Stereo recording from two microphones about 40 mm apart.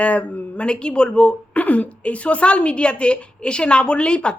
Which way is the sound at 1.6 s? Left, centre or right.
Left.